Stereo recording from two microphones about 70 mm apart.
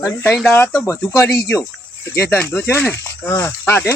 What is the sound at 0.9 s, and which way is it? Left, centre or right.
Speech, left.